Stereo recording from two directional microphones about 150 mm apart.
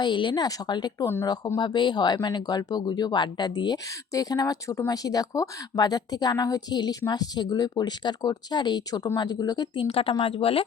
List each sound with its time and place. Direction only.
0.0 s speech: 30° left (ahead or behind)